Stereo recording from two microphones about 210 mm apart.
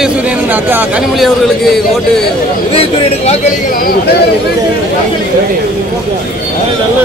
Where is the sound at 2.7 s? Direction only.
30° left (ahead or behind).